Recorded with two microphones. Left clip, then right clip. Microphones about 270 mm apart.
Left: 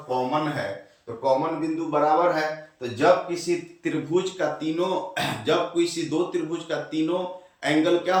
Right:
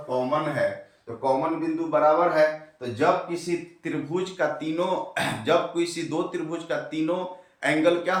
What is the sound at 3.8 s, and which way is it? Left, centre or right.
Speech, centre.